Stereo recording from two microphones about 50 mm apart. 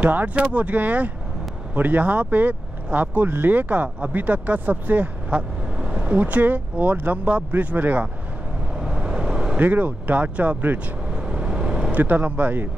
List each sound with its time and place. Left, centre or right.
0.1 s speech: right
0.4 s speech: right
5.3 s vehicle: centre
6.1 s speech: right
8.7 s vehicle: centre
9.6 s speech: right
11.1 s vehicle: centre
11.9 s speech: right